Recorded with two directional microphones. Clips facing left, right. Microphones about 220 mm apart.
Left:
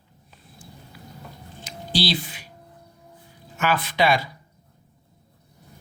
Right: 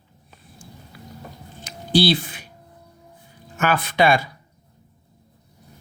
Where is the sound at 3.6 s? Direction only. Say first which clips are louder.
Right 3 dB; 50° right (ahead or behind).